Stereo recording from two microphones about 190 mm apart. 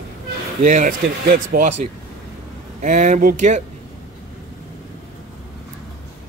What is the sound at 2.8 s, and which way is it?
Speech, 40° right (ahead or behind).